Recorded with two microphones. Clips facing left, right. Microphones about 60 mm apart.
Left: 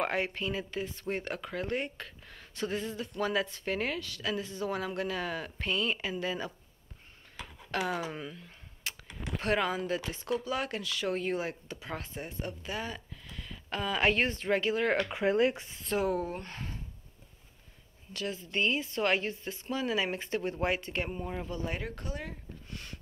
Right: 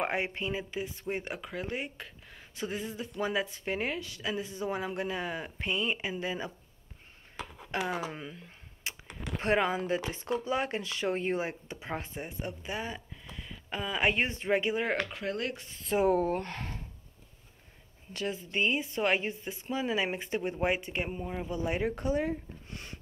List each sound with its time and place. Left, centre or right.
0.0 s speech: right
7.9 s speech: centre
15.0 s speech: left
16.0 s speech: right
18.1 s speech: right